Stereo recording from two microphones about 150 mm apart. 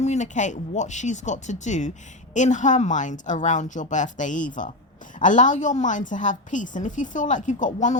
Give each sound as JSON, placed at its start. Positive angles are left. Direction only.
{"t": 0.0, "sound": "a woman's voice", "side_deg": 50}